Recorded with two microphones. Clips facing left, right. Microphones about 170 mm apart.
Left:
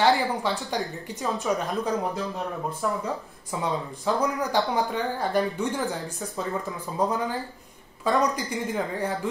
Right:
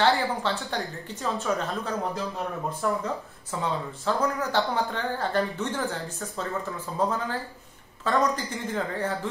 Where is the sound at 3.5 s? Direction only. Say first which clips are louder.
Left 1 dB; 15° left (ahead or behind).